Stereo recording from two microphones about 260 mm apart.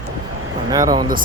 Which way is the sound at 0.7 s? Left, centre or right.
Centre.